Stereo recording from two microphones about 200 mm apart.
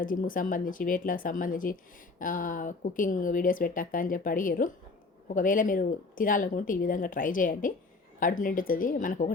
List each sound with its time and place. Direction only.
0.0 s a woman's voice: 45° left (ahead or behind)